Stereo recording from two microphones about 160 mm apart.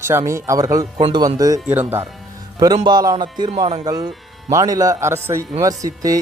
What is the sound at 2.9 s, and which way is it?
Speech, 25° right (ahead or behind).